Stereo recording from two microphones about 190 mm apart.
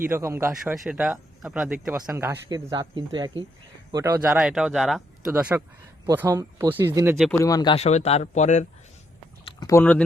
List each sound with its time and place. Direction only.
0.0 s speech: 15° right (ahead or behind)
0.5 s speech: 5° right (ahead or behind)
2.6 s speech: 25° right (ahead or behind)
4.3 s speech: 5° right (ahead or behind)
7.3 s speech: 20° left (ahead or behind); by 8.6 s 40° left (ahead or behind)
9.4 s a sound: 25° left (ahead or behind)